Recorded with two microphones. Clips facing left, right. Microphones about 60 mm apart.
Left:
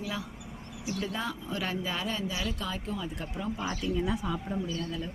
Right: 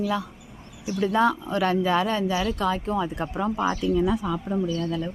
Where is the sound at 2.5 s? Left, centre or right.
Right.